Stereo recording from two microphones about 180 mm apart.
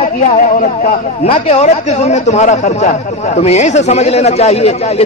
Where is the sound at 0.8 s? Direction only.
35° left (ahead or behind).